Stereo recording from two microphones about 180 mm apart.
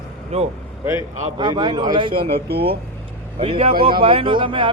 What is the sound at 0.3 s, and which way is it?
Speech, 35° right (ahead or behind).